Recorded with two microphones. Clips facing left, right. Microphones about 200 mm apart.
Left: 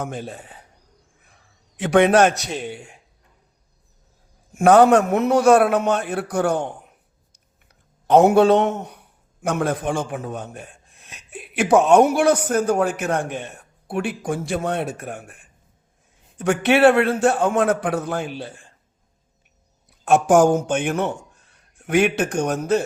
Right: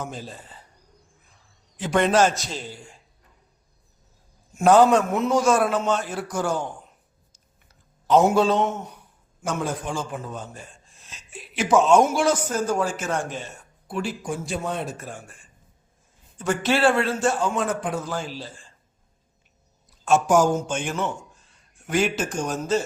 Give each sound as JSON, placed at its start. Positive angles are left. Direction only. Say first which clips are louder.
{"t": 0.0, "sound": "a man's voice", "louder": "left 5 dB", "side_deg": 60}
{"t": 4.5, "sound": "a man's voice", "louder": "left 3 dB", "side_deg": 55}
{"t": 8.0, "sound": "a man's voice", "louder": "left 5 dB", "side_deg": 60}
{"t": 19.9, "sound": "a man's voice", "louder": "left 3 dB", "side_deg": 60}